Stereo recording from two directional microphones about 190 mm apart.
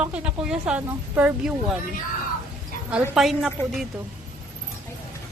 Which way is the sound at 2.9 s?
Centre (ahead or behind).